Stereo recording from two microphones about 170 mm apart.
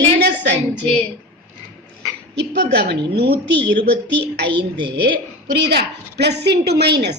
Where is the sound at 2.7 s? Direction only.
85° right.